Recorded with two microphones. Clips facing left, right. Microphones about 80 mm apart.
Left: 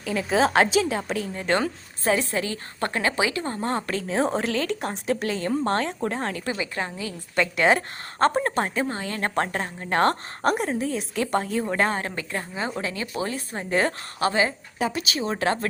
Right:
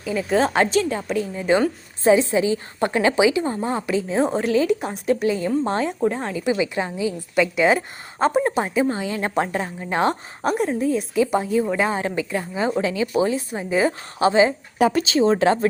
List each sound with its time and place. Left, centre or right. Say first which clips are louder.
0.0 s a woman's voice: right 2 dB; centre
2.1 s a woman's voice: right 7 dB; centre
6.4 s a woman's voice: right 7 dB; centre
11.9 s a woman's voice: right 6 dB; centre
13.6 s a woman's voice: right 2 dB; centre
14.2 s speech: right 7 dB; right